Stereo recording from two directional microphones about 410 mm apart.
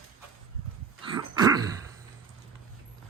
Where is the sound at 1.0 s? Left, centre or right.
Centre.